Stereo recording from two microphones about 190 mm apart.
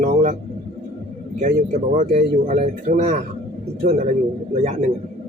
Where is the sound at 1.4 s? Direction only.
40° right (ahead or behind).